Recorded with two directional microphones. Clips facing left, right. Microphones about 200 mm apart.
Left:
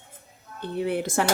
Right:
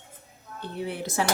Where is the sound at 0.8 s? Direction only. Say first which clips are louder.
Left 4 dB; 55° left (ahead or behind).